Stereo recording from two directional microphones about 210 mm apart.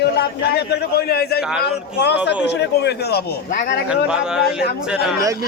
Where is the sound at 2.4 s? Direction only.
55° left (ahead or behind).